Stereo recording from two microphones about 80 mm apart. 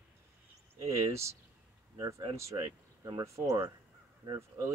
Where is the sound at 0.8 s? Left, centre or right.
Right.